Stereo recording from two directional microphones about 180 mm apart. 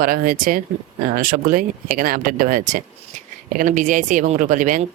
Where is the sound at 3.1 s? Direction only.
45° right (ahead or behind).